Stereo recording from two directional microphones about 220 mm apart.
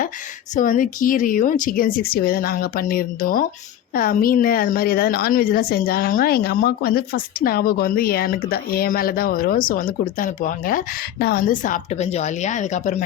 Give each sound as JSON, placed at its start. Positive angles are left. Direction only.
{"t": 0.5, "sound": "a woman's voice", "side_deg": 35}